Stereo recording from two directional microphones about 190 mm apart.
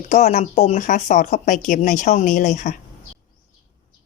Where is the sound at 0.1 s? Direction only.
40° left (ahead or behind).